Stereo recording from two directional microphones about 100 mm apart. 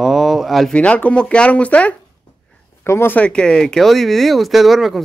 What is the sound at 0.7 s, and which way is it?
Speech, 10° left (ahead or behind).